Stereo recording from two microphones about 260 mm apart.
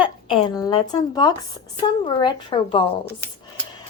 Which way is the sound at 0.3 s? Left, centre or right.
Centre.